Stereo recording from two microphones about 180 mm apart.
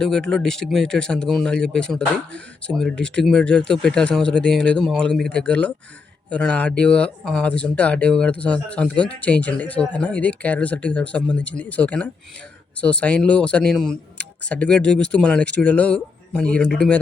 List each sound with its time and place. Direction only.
0.0 s speech: 5° left (ahead or behind)